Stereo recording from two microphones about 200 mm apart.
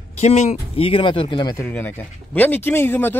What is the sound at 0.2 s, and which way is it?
Speech, 35° left (ahead or behind).